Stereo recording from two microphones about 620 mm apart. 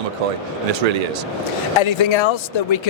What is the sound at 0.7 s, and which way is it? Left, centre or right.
Speech, right.